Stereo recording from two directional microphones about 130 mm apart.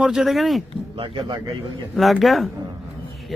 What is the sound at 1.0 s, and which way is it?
Speech, 35° right (ahead or behind).